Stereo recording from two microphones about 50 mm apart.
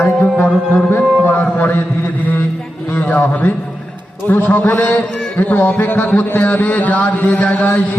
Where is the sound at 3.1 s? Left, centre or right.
Left.